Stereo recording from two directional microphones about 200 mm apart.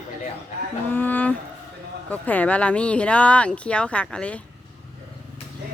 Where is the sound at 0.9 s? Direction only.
10° left (ahead or behind).